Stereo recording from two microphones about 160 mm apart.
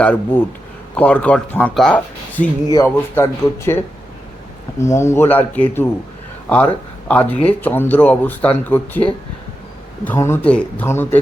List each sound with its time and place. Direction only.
0.0 s speech: 10° left (ahead or behind)
7.1 s speech: 10° left (ahead or behind)